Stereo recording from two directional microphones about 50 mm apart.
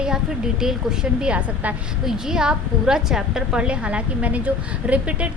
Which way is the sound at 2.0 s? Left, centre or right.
Centre.